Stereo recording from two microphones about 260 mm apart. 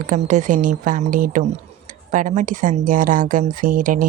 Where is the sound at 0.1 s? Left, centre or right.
Right.